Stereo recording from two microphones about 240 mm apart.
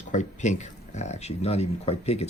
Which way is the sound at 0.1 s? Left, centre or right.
Left.